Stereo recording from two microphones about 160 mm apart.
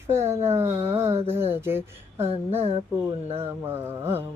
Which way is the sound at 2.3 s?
40° right (ahead or behind).